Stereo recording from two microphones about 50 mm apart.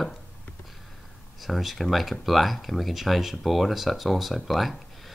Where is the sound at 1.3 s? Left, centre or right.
Centre.